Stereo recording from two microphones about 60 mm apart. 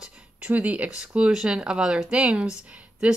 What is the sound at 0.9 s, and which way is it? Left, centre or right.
Speech, centre.